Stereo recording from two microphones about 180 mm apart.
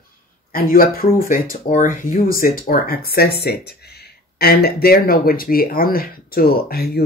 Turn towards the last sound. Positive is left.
turn(degrees=60)  # may be behind; listen again after turning